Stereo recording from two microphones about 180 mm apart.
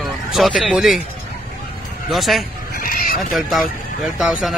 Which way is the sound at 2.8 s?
50° left (ahead or behind).